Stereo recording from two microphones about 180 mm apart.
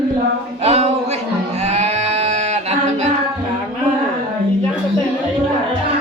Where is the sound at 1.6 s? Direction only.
40° right (ahead or behind).